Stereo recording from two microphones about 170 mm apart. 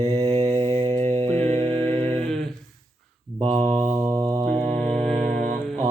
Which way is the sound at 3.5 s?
40° right (ahead or behind).